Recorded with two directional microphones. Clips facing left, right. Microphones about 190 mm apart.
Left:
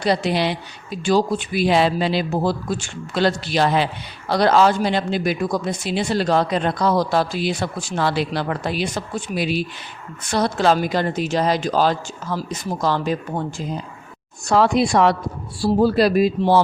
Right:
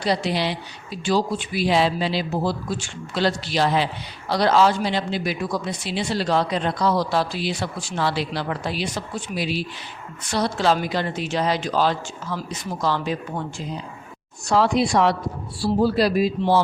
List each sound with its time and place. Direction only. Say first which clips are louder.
0.0 s speech: left 3 dB; 55° left (ahead or behind)
14.4 s speech: left 2 dB; 55° left (ahead or behind)